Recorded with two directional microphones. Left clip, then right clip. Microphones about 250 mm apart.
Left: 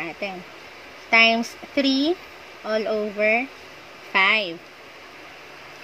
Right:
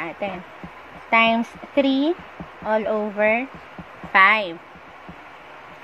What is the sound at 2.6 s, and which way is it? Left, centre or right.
Speech, centre.